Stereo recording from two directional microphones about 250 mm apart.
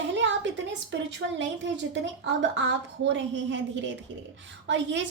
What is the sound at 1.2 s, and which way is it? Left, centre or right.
A woman's voice, right.